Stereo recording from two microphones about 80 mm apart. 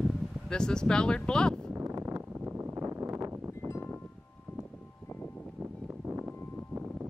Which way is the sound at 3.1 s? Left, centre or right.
Right.